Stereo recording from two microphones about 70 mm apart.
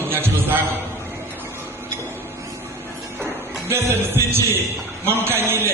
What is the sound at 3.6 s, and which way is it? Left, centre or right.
A man's voice, right.